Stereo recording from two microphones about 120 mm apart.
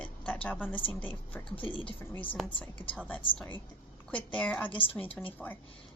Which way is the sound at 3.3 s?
15° left (ahead or behind).